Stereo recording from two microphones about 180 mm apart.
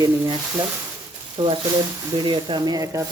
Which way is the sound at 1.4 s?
30° right (ahead or behind).